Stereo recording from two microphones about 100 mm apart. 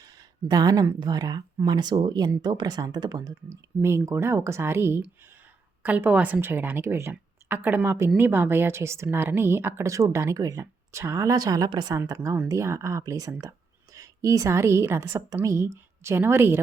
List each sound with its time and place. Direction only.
0.0 s a sound: 40° right (ahead or behind)
0.9 s speech: 40° right (ahead or behind)
3.8 s a woman's voice: 30° right (ahead or behind)